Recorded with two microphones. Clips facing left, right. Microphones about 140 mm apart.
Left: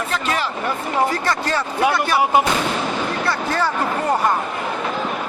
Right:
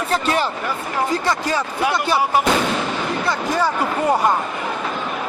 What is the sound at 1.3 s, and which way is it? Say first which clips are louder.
Speech: right 1 dB; 15° right (ahead or behind).